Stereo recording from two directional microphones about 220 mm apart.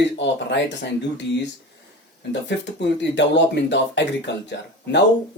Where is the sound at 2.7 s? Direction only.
55° left (ahead or behind).